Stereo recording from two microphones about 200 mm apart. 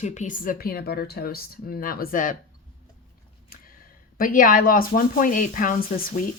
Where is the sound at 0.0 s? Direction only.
35° left (ahead or behind).